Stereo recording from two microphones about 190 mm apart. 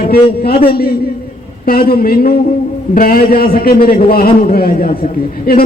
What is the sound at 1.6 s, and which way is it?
A man's voice, 50° left (ahead or behind).